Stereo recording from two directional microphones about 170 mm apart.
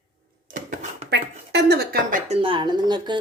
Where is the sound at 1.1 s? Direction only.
80° right.